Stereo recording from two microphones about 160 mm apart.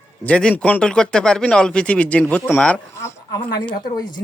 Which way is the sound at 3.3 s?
25° left (ahead or behind).